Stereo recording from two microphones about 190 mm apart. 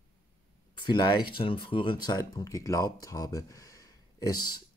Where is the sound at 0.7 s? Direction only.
25° left (ahead or behind).